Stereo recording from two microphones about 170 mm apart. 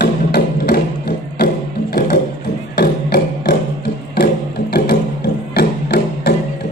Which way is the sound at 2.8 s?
70° left (ahead or behind).